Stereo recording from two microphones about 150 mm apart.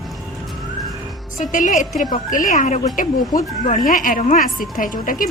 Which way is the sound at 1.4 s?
60° left (ahead or behind).